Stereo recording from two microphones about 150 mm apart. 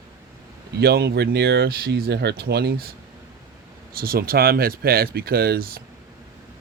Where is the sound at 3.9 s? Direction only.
80° right.